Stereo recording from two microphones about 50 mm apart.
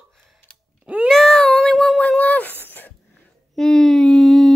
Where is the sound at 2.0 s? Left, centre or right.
Left.